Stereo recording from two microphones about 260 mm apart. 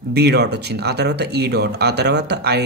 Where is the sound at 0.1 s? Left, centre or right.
Right.